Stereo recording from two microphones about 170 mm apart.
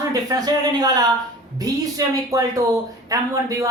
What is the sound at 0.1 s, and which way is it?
Speech, 20° right (ahead or behind).